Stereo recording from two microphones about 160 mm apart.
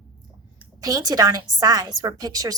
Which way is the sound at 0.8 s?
25° right (ahead or behind).